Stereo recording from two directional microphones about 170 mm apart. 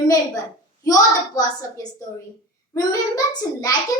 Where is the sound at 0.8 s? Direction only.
20° left (ahead or behind).